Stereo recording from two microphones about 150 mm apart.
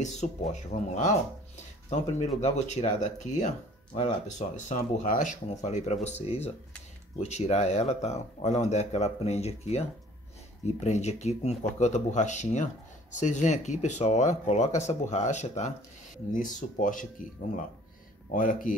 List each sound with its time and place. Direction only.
0.0 s speech: 50° left (ahead or behind)